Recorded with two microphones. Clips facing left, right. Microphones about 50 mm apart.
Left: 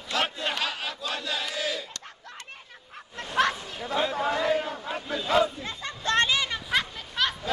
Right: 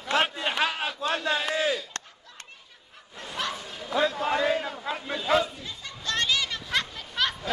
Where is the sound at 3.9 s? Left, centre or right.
Left.